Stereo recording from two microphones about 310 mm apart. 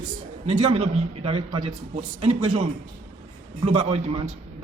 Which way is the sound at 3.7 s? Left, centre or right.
Centre.